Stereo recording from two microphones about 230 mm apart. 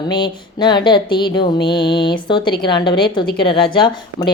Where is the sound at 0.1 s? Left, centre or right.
Centre.